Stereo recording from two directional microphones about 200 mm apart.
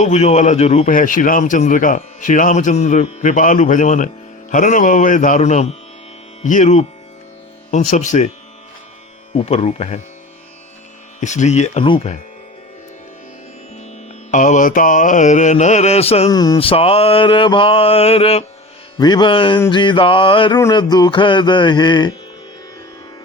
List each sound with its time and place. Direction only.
0.0 s speech: 35° left (ahead or behind)
9.3 s speech: 30° left (ahead or behind)
11.2 s speech: 35° left (ahead or behind)
14.3 s speech: 40° left (ahead or behind)
16.3 s mantra: 20° left (ahead or behind)